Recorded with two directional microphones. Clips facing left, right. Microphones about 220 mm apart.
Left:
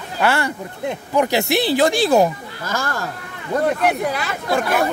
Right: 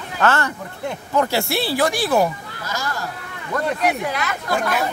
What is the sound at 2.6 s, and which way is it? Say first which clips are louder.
Speech: left 3 dB; 50° left (ahead or behind).